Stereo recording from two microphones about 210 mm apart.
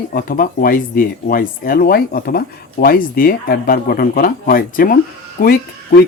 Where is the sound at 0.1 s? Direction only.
45° left (ahead or behind).